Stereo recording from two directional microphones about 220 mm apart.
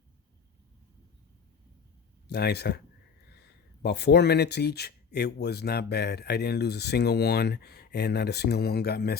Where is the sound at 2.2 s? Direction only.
45° left (ahead or behind).